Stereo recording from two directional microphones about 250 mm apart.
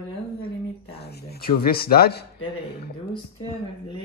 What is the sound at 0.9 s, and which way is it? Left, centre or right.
Speech, left.